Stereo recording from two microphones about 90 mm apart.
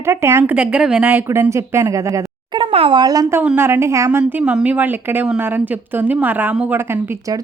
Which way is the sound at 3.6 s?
25° right (ahead or behind).